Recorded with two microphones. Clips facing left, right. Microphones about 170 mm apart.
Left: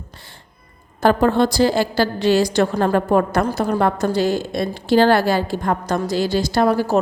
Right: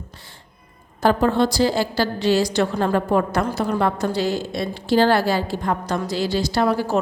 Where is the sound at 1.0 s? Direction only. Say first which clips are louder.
Left 2 dB; 55° left (ahead or behind).